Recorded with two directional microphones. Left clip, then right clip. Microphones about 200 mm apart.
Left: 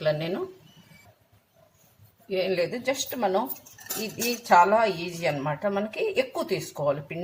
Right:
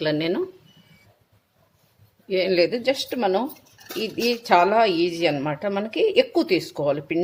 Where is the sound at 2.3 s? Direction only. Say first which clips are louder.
Right 6 dB; 35° right (ahead or behind).